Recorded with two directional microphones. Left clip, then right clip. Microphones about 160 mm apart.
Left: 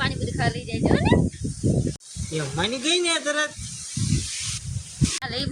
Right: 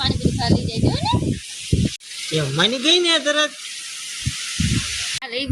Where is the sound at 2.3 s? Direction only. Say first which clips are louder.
Right 7 dB; 5° left (ahead or behind).